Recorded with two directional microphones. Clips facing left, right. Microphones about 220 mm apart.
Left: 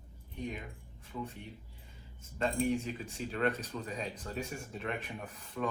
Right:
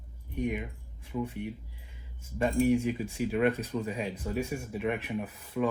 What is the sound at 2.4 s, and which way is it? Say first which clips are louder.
A man's voice: right 6 dB; 10° right (ahead or behind).